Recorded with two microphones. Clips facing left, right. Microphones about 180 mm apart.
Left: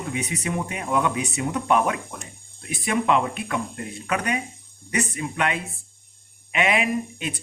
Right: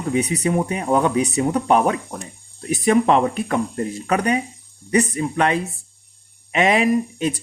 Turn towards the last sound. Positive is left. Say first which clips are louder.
# right 8 dB
turn(degrees=-40)  # may be behind; listen again after turning